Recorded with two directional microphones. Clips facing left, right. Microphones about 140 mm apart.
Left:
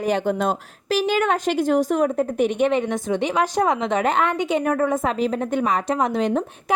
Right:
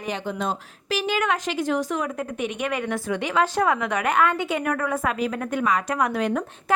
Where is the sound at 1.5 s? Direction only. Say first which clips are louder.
Left 5 dB; 50° left (ahead or behind).